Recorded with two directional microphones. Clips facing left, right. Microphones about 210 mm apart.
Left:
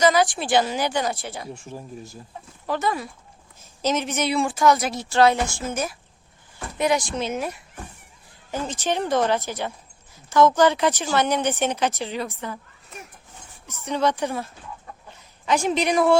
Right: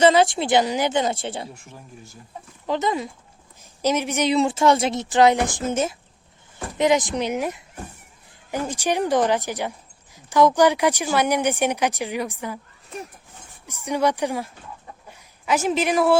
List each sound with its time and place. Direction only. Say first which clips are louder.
0.0 s a woman's voice: right 3 dB; 25° right (ahead or behind)
2.6 s a woman's voice: right 2 dB; 20° right (ahead or behind)
13.7 s a man's voice: right 1 dB; 15° right (ahead or behind)